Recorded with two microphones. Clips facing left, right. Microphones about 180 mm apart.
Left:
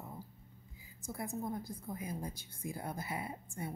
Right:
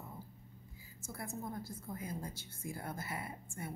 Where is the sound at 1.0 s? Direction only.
20° left (ahead or behind).